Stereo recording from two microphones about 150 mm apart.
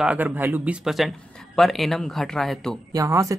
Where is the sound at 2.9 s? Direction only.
20° right (ahead or behind).